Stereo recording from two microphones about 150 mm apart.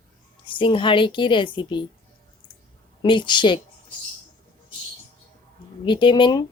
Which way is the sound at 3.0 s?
30° left (ahead or behind).